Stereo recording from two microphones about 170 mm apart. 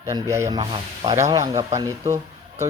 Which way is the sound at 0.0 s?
20° right (ahead or behind).